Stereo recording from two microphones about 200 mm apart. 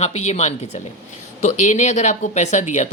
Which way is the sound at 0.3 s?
35° left (ahead or behind).